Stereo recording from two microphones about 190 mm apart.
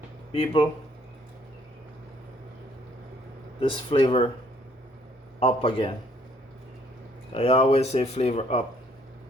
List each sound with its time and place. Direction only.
0.3 s speech: 30° left (ahead or behind)
3.6 s speech: 25° left (ahead or behind)
5.4 s speech: 30° left (ahead or behind)
7.3 s speech: 30° left (ahead or behind)